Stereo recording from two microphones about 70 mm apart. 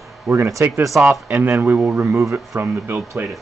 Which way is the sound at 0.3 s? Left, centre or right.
Right.